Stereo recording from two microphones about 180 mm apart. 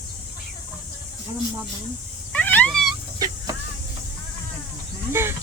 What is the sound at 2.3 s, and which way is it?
Dog, 10° left (ahead or behind).